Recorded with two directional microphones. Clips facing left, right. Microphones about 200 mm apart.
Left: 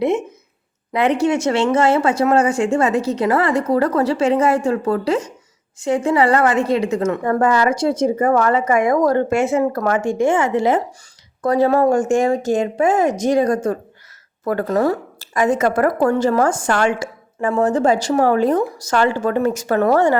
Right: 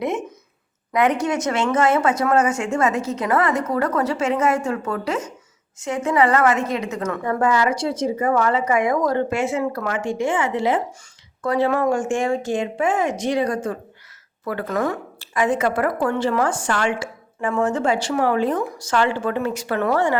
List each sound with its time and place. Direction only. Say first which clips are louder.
0.9 s a woman's voice: left 3 dB; 30° left (ahead or behind)
7.3 s a woman's voice: left 2 dB; 45° left (ahead or behind)